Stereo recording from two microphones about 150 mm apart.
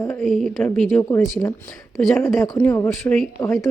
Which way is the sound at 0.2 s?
Centre (ahead or behind).